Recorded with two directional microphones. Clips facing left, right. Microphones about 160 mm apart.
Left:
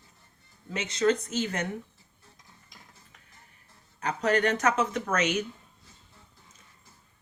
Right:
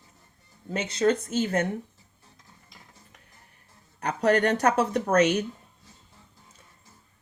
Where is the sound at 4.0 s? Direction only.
35° right (ahead or behind).